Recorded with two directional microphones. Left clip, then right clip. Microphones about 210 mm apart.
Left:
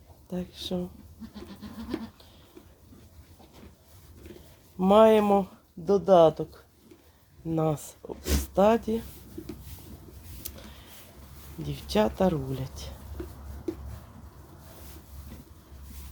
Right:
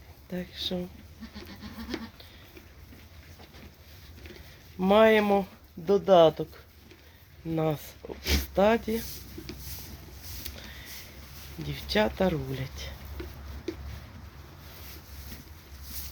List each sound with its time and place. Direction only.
0.3 s speech: 10° left (ahead or behind)
4.8 s speech: 10° left (ahead or behind)
10.5 s printer: 10° left (ahead or behind)
11.6 s speech: 10° left (ahead or behind)